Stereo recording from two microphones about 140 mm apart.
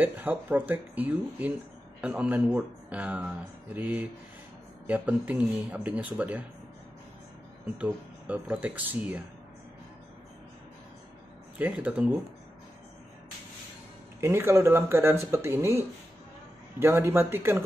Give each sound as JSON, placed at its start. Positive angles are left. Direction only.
{"t": 0.0, "sound": "speech", "side_deg": -15}
{"t": 7.7, "sound": "speech", "side_deg": -10}
{"t": 11.5, "sound": "speech", "side_deg": -10}
{"t": 14.2, "sound": "speech", "side_deg": -20}
{"t": 16.8, "sound": "speech", "side_deg": -15}